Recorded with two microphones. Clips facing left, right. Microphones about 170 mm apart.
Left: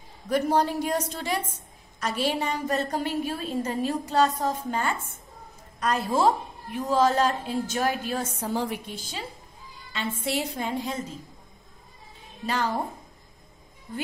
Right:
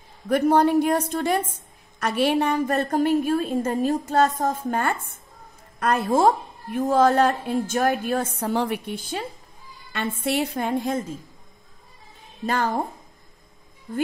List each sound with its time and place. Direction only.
0.3 s a woman's voice: 55° right (ahead or behind)
12.4 s a woman's voice: 50° right (ahead or behind)